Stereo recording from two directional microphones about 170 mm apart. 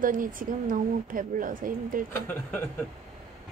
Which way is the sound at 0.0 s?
55° right (ahead or behind).